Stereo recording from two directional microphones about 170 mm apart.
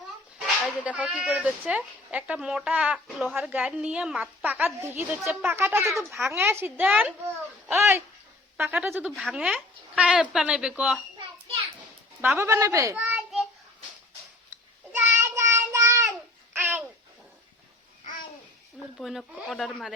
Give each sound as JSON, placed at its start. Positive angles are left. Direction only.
{"t": 0.9, "sound": "speech", "side_deg": -5}
{"t": 12.2, "sound": "a child's voice", "side_deg": -10}
{"t": 14.9, "sound": "child singing", "side_deg": -15}
{"t": 16.0, "sound": "babbling", "side_deg": -10}
{"t": 18.9, "sound": "speech", "side_deg": 0}